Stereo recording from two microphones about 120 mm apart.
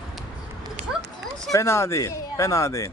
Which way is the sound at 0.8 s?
70° right (ahead or behind).